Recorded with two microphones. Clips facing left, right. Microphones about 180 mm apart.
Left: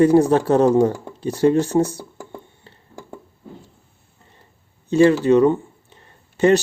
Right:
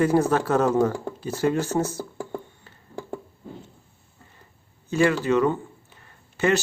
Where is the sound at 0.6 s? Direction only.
15° left (ahead or behind).